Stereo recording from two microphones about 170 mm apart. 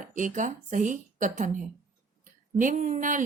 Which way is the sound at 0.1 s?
50° right (ahead or behind).